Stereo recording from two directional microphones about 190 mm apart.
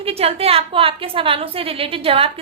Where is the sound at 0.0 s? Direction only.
30° right (ahead or behind).